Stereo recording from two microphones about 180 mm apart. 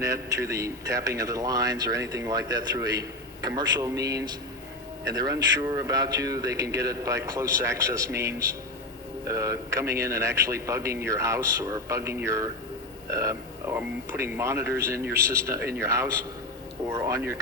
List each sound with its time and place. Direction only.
0.0 s a man's voice: 20° right (ahead or behind)